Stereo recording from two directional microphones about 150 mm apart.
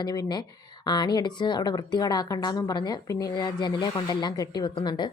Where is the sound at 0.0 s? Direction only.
25° left (ahead or behind).